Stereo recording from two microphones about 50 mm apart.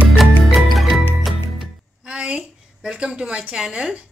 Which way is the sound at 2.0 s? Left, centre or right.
Centre.